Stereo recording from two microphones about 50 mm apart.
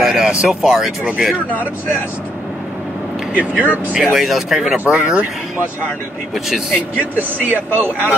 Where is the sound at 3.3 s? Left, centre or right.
Right.